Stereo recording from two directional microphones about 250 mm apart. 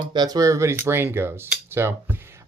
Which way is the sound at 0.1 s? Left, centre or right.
Centre.